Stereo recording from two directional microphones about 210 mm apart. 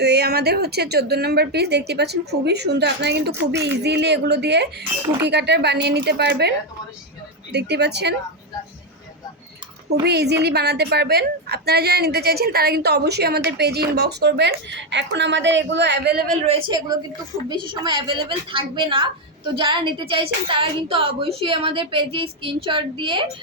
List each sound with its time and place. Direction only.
0.0 s a woman's voice: 50° right (ahead or behind)
7.5 s a woman's voice: 55° right (ahead or behind)
10.0 s a woman's voice: 50° right (ahead or behind)
16.5 s a woman's voice: 25° right (ahead or behind)